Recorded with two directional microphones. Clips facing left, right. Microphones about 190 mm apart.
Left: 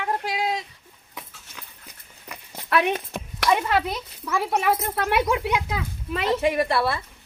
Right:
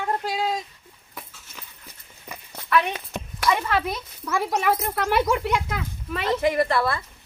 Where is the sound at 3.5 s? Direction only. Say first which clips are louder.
Left 1 dB; 15° left (ahead or behind).